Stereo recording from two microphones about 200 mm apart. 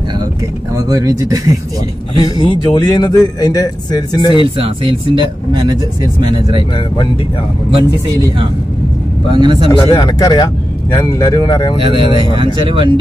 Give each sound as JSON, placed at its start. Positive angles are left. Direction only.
{"t": 0.7, "sound": "speech", "side_deg": -15}
{"t": 2.1, "sound": "a man's voice", "side_deg": 20}
{"t": 4.6, "sound": "speech", "side_deg": -25}
{"t": 7.7, "sound": "speech", "side_deg": -25}
{"t": 9.7, "sound": "a man's voice", "side_deg": 20}
{"t": 11.8, "sound": "speech", "side_deg": -25}